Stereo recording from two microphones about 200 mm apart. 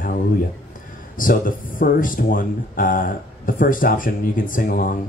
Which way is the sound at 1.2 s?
45° left (ahead or behind).